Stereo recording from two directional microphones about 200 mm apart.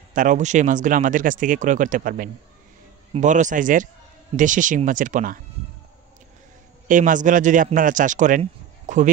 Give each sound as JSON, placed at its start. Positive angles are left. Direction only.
{"t": 0.1, "sound": "speech", "side_deg": -40}
{"t": 6.9, "sound": "speech", "side_deg": -40}